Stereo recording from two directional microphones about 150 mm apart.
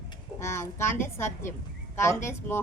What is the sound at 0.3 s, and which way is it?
A woman's voice, 15° left (ahead or behind).